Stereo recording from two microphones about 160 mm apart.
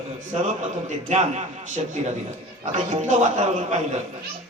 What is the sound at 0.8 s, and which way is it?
Speech, 45° right (ahead or behind).